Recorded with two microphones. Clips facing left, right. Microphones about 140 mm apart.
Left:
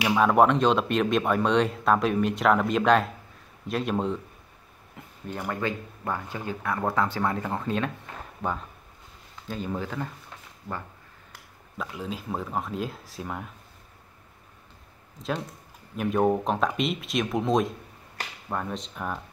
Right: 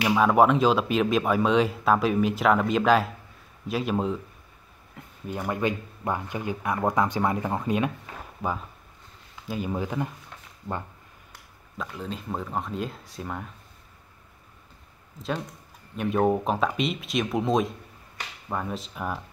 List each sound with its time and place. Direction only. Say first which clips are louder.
0.0 s speech: even; centre (ahead or behind)
5.0 s a sound: even; centre (ahead or behind)
5.5 s speech: right 3 dB; 15° right (ahead or behind)
11.8 s speech: even; 5° left (ahead or behind)
16.0 s speech: even; centre (ahead or behind)